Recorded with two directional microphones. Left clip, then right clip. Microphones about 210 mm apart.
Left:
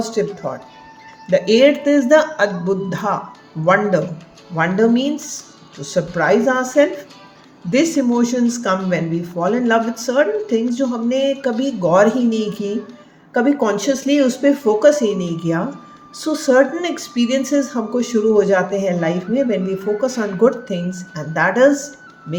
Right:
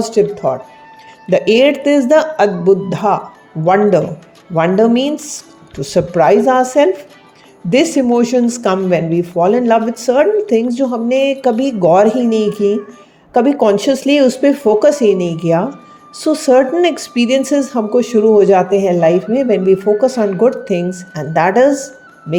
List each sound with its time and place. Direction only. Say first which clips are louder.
0.0 s a woman's voice: right 7 dB; 30° right (ahead or behind)